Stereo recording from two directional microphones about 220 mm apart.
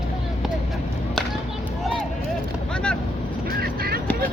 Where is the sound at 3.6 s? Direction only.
45° right (ahead or behind).